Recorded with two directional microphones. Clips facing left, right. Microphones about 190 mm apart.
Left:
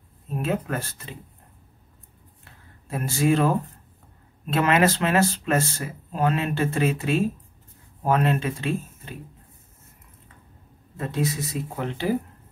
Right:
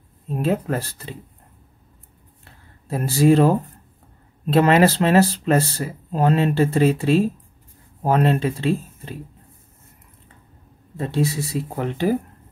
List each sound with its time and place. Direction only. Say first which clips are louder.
0.4 s speech: right 5 dB; 35° right (ahead or behind)
2.9 s speech: right 6 dB; 35° right (ahead or behind)
11.0 s speech: right 4 dB; 30° right (ahead or behind)